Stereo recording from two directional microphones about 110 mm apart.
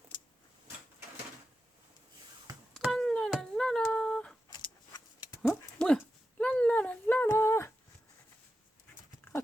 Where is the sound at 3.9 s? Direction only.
10° left (ahead or behind).